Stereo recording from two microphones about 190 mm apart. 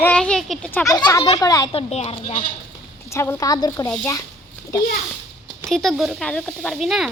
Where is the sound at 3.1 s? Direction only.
15° left (ahead or behind).